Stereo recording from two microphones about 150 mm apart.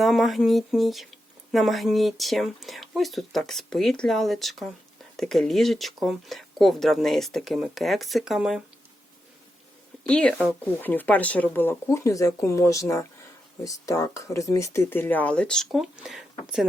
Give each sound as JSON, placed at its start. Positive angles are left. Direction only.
{"t": 0.0, "sound": "speech", "side_deg": 0}
{"t": 10.0, "sound": "speech", "side_deg": 5}